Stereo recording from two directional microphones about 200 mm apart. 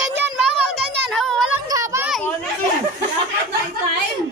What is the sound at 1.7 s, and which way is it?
Children playing, 15° right (ahead or behind).